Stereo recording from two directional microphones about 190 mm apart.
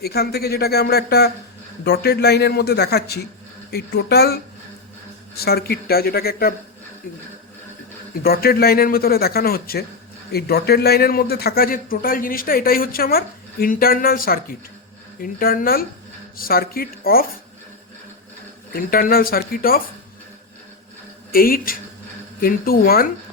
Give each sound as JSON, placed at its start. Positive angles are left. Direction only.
{"t": 0.0, "sound": "speech", "side_deg": 55}
{"t": 5.4, "sound": "speech", "side_deg": 55}
{"t": 8.2, "sound": "a man's voice", "side_deg": 55}
{"t": 18.7, "sound": "a man's voice", "side_deg": 50}
{"t": 21.3, "sound": "a man's voice", "side_deg": 50}